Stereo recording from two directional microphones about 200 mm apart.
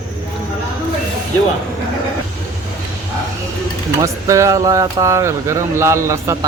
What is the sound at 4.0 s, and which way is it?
Speech, 15° right (ahead or behind).